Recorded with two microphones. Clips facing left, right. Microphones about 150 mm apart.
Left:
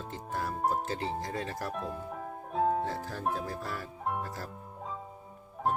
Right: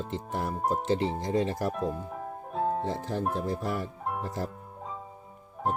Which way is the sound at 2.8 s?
20° right (ahead or behind).